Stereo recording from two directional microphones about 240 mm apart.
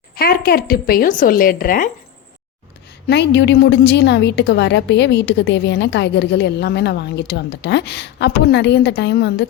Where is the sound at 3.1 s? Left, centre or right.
Left.